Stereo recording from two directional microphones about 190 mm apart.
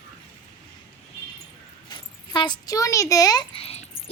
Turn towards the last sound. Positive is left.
turn(degrees=30)  # may be behind; listen again after turning